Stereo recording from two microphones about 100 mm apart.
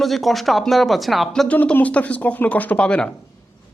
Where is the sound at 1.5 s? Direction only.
15° left (ahead or behind).